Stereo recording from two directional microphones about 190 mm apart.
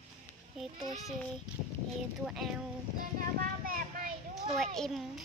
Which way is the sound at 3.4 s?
50° right (ahead or behind).